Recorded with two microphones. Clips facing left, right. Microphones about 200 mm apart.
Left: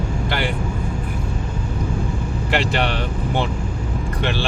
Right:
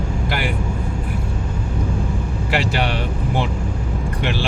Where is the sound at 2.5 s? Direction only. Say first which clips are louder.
Even; 5° right (ahead or behind).